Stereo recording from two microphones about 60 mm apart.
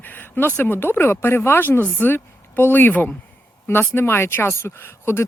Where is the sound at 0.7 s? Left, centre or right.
Left.